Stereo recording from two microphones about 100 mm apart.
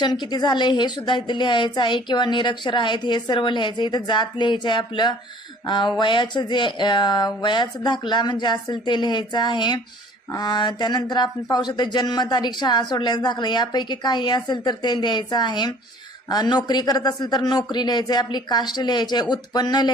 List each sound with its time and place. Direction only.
0.0 s speech: 45° left (ahead or behind)